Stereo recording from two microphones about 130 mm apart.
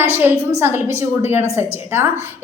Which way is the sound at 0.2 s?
15° right (ahead or behind).